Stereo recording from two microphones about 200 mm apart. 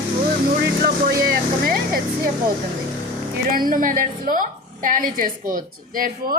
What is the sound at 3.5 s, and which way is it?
Speech, 45° right (ahead or behind).